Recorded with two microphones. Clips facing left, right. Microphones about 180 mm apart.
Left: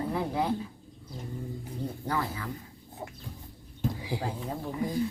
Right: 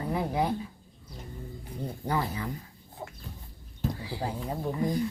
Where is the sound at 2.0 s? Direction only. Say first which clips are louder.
Right 3 dB; 20° right (ahead or behind).